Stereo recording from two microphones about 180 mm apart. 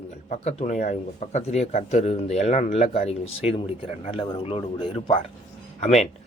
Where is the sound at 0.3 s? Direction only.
40° left (ahead or behind).